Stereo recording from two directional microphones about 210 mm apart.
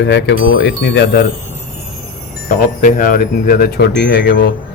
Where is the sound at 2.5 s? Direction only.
40° left (ahead or behind).